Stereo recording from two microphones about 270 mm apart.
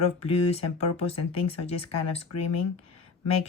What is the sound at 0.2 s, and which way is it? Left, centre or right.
Speech, left.